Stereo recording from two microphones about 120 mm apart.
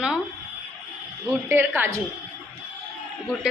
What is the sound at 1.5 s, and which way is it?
Speech, 20° right (ahead or behind).